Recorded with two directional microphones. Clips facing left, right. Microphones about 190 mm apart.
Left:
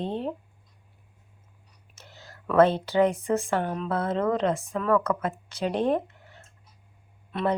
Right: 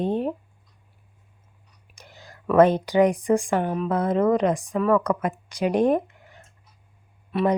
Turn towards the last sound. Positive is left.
turn(degrees=-5)  # may be behind; listen again after turning